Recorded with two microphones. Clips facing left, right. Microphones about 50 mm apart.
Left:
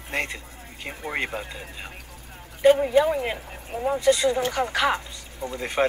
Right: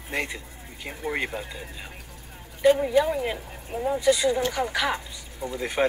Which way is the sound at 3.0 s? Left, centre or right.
Centre.